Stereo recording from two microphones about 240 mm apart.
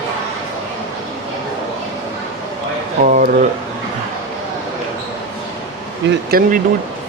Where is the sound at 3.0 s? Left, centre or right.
Right.